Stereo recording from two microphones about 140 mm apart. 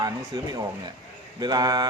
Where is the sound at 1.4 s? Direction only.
30° right (ahead or behind).